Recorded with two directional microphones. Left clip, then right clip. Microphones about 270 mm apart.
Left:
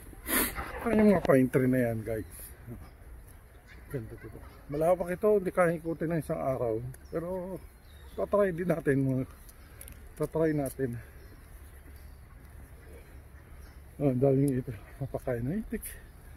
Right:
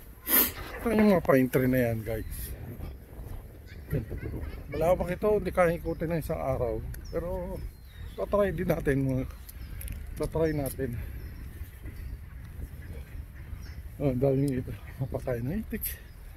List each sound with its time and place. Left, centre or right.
0.2 s speech: centre
4.7 s speech: right
13.9 s speech: right